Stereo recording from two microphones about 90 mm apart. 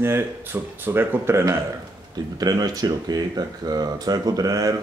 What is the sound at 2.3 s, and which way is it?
Speech, 45° right (ahead or behind).